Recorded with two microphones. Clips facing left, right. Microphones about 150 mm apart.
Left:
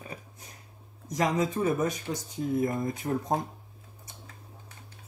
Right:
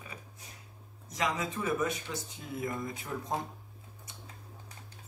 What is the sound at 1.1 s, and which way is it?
Speech, 40° left (ahead or behind).